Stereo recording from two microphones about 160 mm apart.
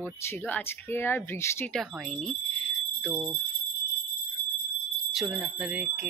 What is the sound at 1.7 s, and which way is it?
Speech, centre (ahead or behind).